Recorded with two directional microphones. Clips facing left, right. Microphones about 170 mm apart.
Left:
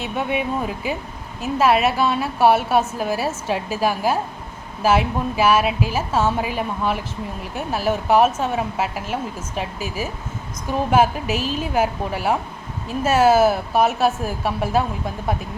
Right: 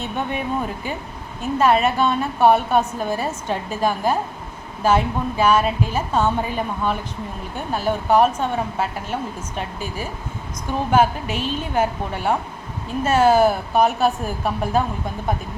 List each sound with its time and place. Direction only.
0.0 s a woman's voice: 5° left (ahead or behind)
11.3 s a woman's voice: 30° right (ahead or behind)
11.7 s a woman's voice: 5° left (ahead or behind)